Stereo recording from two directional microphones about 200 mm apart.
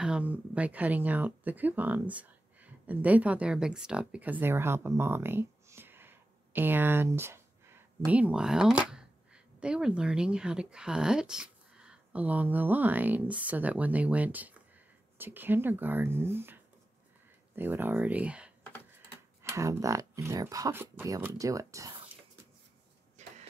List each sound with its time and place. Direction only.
0.0 s speech: 5° right (ahead or behind)
19.5 s speech: 15° right (ahead or behind)
23.2 s a sound: 35° right (ahead or behind)